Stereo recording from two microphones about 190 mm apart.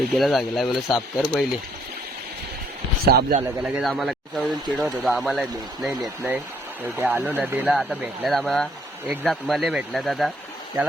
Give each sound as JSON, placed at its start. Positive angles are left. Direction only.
{"t": 0.1, "sound": "speech", "side_deg": 0}
{"t": 3.1, "sound": "speech", "side_deg": -55}
{"t": 3.6, "sound": "speech", "side_deg": 0}